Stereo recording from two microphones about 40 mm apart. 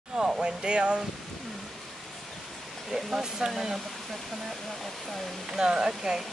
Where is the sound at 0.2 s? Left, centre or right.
Centre.